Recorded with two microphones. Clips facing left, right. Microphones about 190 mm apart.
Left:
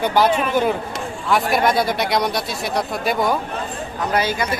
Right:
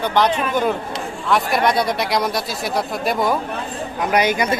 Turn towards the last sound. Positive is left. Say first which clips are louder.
# right 3 dB
turn(degrees=-20)  # may be behind; listen again after turning